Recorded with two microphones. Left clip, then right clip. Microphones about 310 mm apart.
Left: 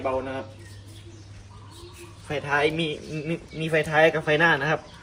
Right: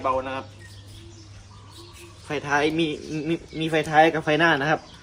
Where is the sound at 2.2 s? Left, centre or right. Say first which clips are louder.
Right 1 dB; right.